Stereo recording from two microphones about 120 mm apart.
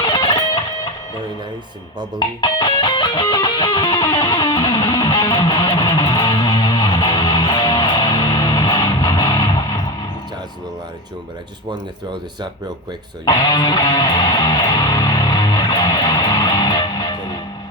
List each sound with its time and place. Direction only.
0.0 s music: 40° left (ahead or behind)
2.1 s music: 40° left (ahead or behind)
13.2 s music: 40° left (ahead or behind)